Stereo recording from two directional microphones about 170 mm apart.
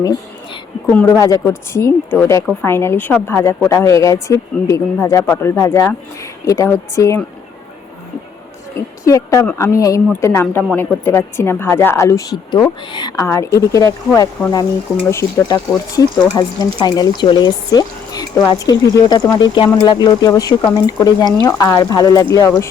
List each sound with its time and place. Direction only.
0.9 s speech: 10° left (ahead or behind)
1.1 s speech: 20° left (ahead or behind)
8.7 s speech: 20° left (ahead or behind)